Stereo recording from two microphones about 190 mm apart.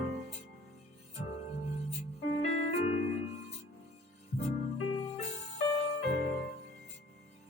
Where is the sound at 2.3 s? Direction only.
40° left (ahead or behind).